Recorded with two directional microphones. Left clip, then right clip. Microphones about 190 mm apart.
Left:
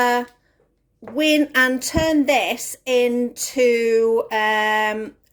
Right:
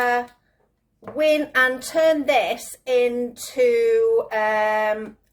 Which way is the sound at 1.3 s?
50° left (ahead or behind).